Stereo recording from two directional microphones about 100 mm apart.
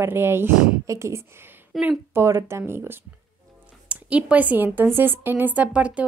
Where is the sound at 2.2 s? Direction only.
25° right (ahead or behind).